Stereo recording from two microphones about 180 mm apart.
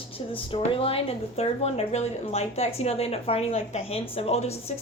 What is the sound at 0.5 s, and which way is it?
Speech, 30° left (ahead or behind).